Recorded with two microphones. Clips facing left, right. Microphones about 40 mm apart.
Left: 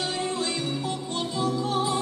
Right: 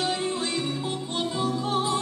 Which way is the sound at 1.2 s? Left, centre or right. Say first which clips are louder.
Even; right.